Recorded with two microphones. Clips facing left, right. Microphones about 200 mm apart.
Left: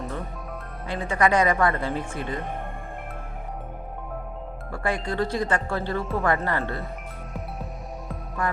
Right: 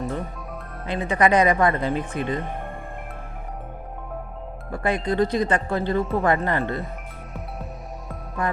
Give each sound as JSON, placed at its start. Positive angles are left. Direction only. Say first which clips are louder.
{"t": 0.9, "sound": "speech", "louder": "right 3 dB", "side_deg": -20}
{"t": 4.7, "sound": "speech", "louder": "right 4 dB", "side_deg": -20}